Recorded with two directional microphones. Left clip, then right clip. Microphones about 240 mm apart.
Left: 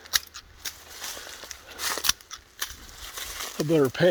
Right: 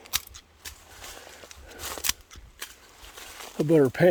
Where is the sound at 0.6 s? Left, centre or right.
Left.